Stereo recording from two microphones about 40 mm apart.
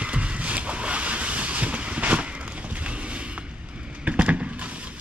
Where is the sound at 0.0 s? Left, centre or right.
Right.